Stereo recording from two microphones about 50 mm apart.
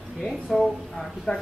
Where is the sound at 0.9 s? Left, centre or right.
Centre.